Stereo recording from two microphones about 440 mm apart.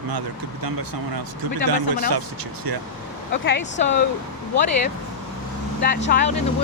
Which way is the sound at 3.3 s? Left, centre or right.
Left.